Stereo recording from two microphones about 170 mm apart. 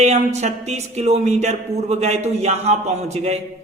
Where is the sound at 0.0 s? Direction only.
40° right (ahead or behind).